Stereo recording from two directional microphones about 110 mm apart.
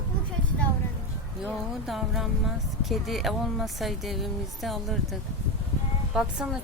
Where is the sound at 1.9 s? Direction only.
Centre (ahead or behind).